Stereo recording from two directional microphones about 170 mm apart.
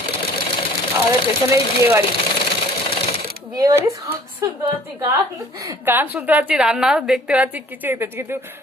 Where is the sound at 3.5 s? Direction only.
20° right (ahead or behind).